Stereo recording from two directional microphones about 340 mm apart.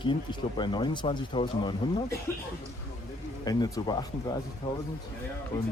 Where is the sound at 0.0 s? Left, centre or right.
Centre.